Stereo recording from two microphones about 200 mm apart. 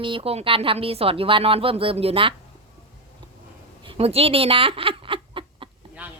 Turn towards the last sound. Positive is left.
turn(degrees=-25)  # may be behind; listen again after turning